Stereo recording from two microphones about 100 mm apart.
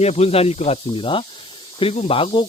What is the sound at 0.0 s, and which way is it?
Speech, 90° left.